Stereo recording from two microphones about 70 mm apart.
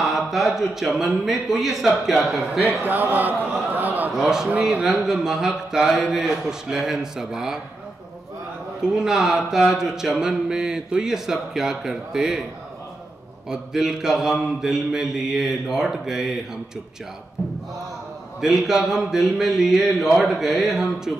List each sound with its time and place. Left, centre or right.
0.0 s speech: centre
2.8 s a man's voice: right
3.7 s a sound: right
4.1 s speech: centre
8.8 s speech: centre
13.5 s speech: centre
18.4 s speech: centre